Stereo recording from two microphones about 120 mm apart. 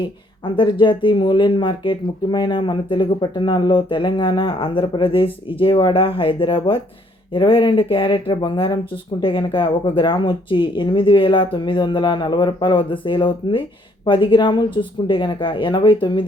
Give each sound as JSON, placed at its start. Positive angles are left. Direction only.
{"t": 0.4, "sound": "speech", "side_deg": 40}